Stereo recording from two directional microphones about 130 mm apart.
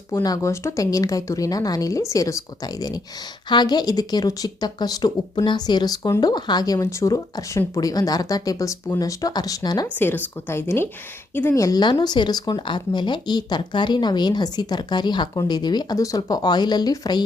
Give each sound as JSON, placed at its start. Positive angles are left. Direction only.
{"t": 0.1, "sound": "speech", "side_deg": 30}
{"t": 10.0, "sound": "a woman's voice", "side_deg": 15}